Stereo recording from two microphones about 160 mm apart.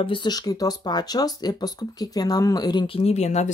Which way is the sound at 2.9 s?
45° left (ahead or behind).